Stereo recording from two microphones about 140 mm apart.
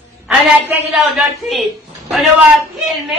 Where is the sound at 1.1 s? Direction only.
Centre (ahead or behind).